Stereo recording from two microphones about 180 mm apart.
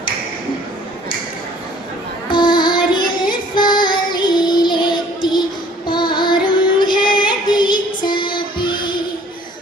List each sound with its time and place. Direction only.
2.3 s child singing: 25° left (ahead or behind)
7.2 s female singing: 25° left (ahead or behind)